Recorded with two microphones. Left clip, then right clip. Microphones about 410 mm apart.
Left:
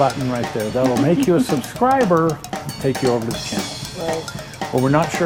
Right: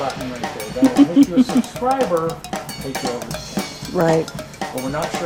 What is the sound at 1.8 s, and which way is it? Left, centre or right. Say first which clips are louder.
Stir: left 4 dB; left.